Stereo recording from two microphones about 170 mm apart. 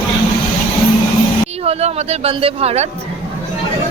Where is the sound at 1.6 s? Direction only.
40° right (ahead or behind).